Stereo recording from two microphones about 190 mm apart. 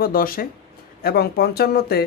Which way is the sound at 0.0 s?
50° left (ahead or behind).